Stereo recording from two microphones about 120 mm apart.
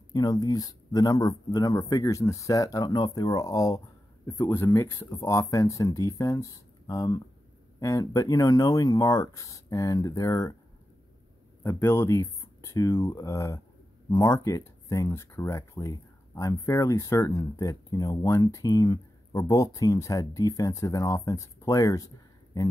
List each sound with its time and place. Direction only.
0.1 s speech: 35° left (ahead or behind)
11.6 s speech: 20° left (ahead or behind)